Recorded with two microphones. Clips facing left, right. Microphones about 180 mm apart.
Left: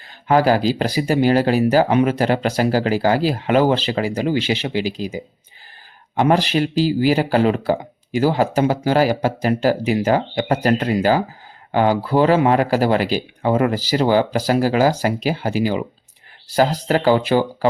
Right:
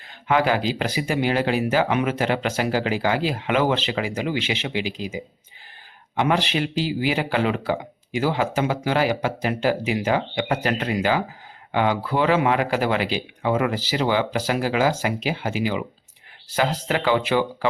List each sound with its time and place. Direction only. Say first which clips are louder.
0.3 s speech: left 5 dB; 40° left (ahead or behind)